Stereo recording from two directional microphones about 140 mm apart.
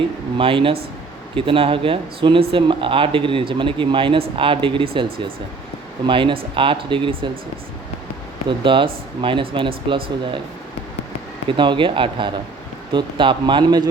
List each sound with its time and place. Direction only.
0.3 s speech: 40° right (ahead or behind)
6.1 s speech: 40° right (ahead or behind)
8.4 s speech: 35° right (ahead or behind)
11.4 s speech: 35° right (ahead or behind)